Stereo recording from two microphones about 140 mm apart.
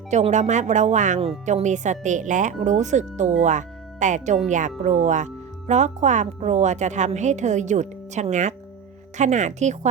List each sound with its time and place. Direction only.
0.1 s speech: 55° right (ahead or behind)